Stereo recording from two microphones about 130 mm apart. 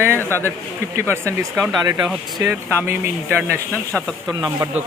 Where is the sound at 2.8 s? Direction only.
20° right (ahead or behind).